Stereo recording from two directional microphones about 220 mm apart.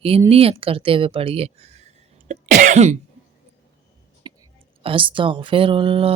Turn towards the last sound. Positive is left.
turn(degrees=-25)  # may be behind; listen again after turning